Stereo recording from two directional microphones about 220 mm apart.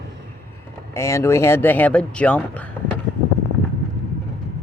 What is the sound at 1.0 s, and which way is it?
Speech, 15° left (ahead or behind).